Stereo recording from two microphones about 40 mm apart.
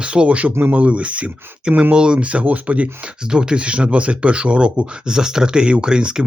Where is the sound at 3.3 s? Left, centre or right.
Right.